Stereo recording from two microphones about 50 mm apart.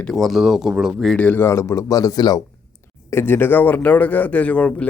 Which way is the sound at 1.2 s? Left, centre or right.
Left.